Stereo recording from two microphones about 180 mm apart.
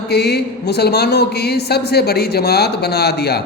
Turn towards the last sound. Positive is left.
turn(degrees=60)  # may be behind; listen again after turning